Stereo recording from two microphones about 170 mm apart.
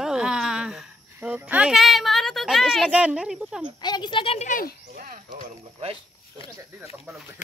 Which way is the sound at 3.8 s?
25° left (ahead or behind).